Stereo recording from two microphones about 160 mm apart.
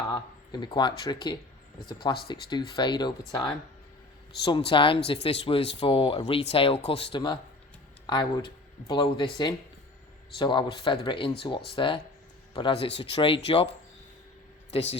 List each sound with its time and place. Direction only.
0.1 s speech: 25° left (ahead or behind)